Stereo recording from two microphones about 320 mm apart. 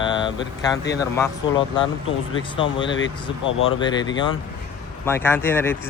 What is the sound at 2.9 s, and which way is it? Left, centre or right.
Speech, left.